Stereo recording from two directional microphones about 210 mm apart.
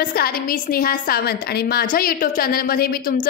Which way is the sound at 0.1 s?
45° left (ahead or behind).